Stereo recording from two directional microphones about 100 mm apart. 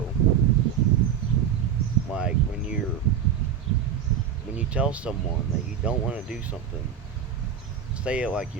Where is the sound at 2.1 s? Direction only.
10° right (ahead or behind).